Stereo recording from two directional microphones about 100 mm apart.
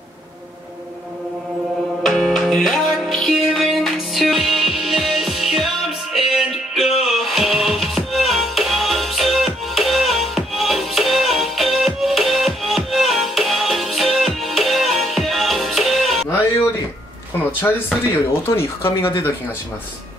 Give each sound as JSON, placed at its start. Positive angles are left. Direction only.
{"t": 2.0, "sound": "music", "side_deg": 5}
{"t": 17.6, "sound": "speech", "side_deg": 20}